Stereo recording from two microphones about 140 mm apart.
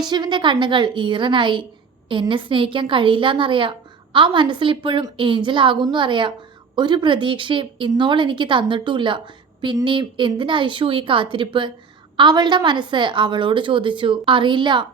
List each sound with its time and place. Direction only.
0.0 s a woman's voice: 30° right (ahead or behind)